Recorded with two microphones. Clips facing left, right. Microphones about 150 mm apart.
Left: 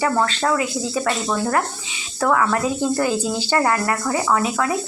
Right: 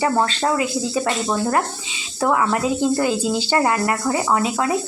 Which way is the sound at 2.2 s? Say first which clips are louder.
Even; 20° right (ahead or behind).